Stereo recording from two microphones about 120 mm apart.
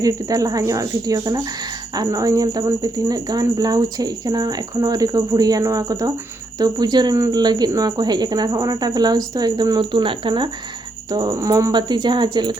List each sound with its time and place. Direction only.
0.0 s a woman's voice: 30° right (ahead or behind)
11.7 s a woman's voice: 40° right (ahead or behind)